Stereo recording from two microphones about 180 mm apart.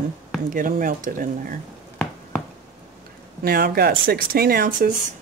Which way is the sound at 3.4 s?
55° right (ahead or behind).